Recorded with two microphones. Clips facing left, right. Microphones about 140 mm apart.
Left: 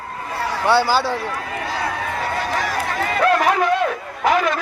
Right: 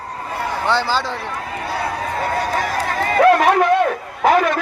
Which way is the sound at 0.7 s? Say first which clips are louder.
Left 4 dB; 10° left (ahead or behind).